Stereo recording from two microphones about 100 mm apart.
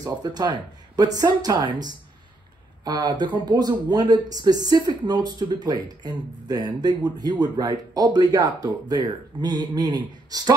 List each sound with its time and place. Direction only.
0.0 s speech: 40° right (ahead or behind)